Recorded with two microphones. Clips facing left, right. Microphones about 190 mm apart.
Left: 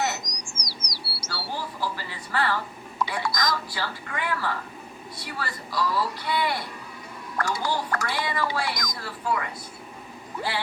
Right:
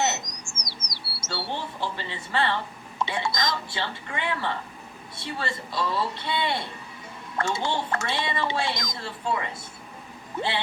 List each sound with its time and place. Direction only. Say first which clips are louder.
0.0 s bird: right 1 dB; 25° right (ahead or behind)
5.1 s speech: right 3 dB; 25° right (ahead or behind)